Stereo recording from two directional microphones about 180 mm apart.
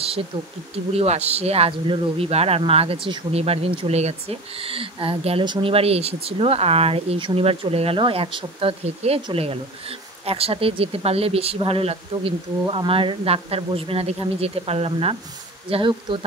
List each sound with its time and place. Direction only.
0.9 s speech: 35° right (ahead or behind)